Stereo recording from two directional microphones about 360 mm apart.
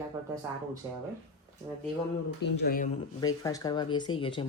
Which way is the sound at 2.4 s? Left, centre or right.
Left.